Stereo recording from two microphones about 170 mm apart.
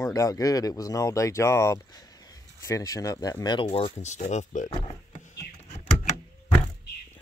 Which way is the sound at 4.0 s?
45° left (ahead or behind).